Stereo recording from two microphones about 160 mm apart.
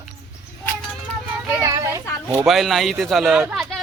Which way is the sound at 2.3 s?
5° right (ahead or behind).